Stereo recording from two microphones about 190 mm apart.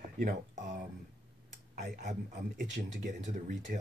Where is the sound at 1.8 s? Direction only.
45° right (ahead or behind).